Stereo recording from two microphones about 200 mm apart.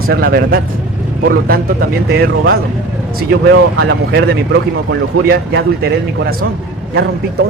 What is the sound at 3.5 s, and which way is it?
Speech, 55° right (ahead or behind).